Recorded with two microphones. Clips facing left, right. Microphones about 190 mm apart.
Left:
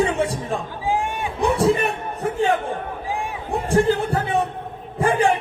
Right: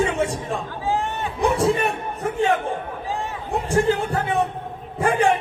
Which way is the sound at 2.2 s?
35° left (ahead or behind).